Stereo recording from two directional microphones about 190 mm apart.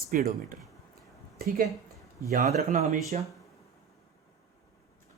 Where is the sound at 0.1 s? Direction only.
50° right (ahead or behind).